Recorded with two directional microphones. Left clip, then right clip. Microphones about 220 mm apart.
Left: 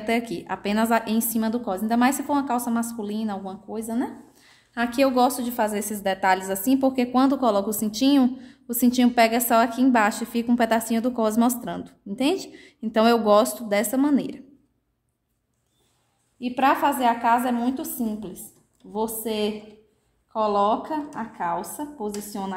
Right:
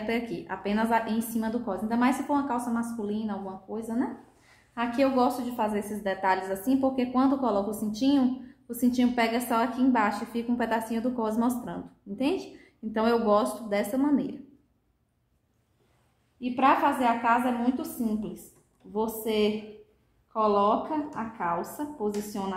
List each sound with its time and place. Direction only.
0.0 s a woman's voice: 45° left (ahead or behind)
16.3 s a woman's voice: 45° left (ahead or behind)